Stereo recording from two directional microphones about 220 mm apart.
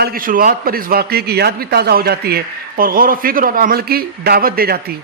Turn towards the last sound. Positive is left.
turn(degrees=-45)  # may be behind; listen again after turning